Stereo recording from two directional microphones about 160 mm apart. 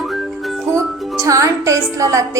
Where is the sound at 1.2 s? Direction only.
20° right (ahead or behind).